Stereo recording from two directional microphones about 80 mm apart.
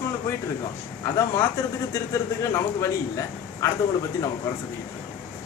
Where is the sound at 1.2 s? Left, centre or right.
Left.